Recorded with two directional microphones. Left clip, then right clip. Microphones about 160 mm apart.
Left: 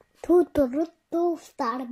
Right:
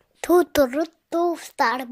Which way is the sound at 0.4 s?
70° right (ahead or behind).